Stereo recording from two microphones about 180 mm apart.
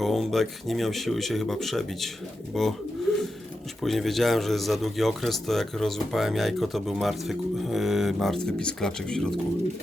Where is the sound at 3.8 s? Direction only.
Centre (ahead or behind).